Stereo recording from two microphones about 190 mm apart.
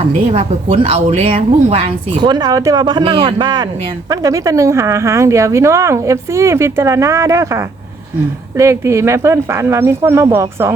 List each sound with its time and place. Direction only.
0.3 s a woman's voice: 30° right (ahead or behind); by 10.8 s 15° right (ahead or behind)